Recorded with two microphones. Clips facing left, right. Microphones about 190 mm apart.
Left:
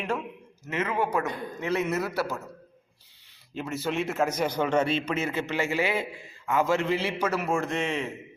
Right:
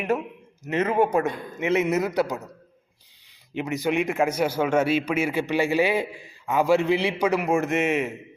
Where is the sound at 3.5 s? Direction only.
15° right (ahead or behind).